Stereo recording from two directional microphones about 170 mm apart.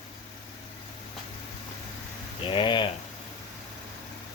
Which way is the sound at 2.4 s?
30° left (ahead or behind).